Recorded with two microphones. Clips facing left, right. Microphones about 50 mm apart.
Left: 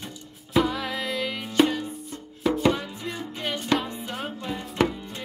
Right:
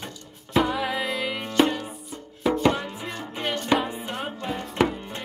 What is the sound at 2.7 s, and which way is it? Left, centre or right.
Music, centre.